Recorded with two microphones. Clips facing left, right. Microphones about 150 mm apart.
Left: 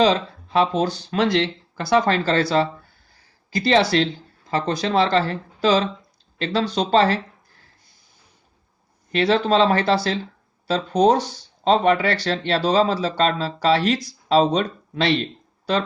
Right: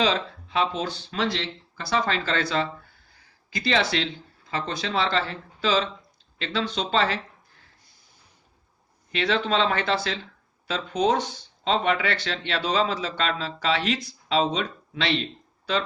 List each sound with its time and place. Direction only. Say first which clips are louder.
0.0 s speech: left 6 dB; 40° left (ahead or behind)
9.1 s speech: left 6 dB; 40° left (ahead or behind)